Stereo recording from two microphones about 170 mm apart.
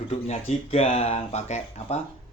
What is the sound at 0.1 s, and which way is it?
Speech, 40° left (ahead or behind).